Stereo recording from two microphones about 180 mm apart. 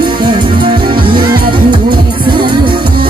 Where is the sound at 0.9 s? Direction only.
25° right (ahead or behind).